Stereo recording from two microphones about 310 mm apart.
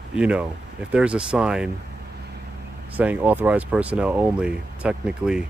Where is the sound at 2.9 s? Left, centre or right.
Centre.